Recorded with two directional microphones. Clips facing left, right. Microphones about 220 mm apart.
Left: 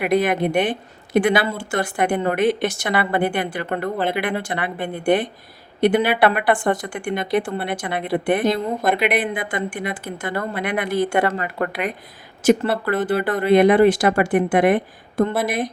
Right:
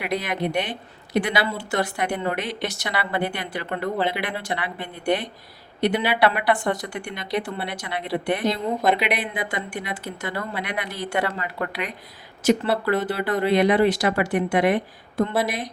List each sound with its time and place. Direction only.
0.0 s a woman's voice: 50° left (ahead or behind)